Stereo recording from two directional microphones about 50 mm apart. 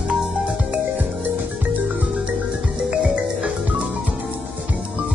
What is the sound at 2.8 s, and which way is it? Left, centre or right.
Music, centre.